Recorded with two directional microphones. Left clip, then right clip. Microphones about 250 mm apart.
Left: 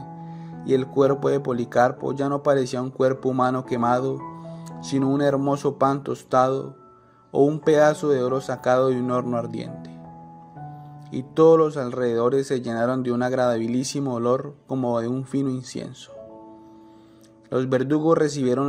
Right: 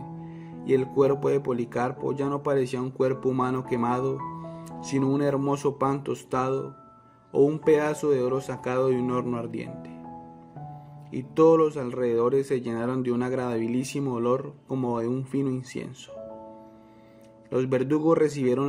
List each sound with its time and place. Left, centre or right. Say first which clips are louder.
0.9 s speech: left 4 dB; centre
11.1 s speech: left 4 dB; centre
17.6 s speech: left 3 dB; centre